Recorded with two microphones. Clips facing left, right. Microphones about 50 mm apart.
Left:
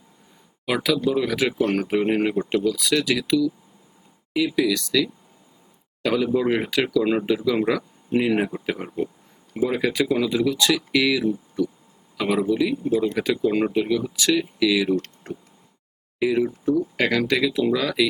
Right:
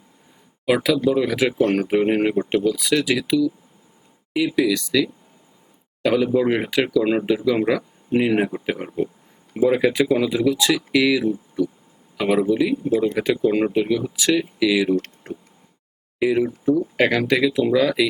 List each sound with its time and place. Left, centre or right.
0.6 s speech: centre
15.3 s a sound: centre
16.1 s speech: centre